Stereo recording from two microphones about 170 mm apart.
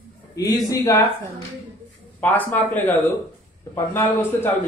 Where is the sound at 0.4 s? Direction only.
20° left (ahead or behind).